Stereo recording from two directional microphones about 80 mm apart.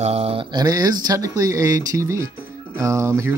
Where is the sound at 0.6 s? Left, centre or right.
Right.